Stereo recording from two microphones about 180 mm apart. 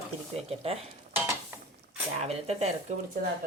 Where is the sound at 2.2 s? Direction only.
35° right (ahead or behind).